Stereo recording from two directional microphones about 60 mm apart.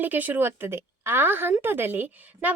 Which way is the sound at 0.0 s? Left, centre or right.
Right.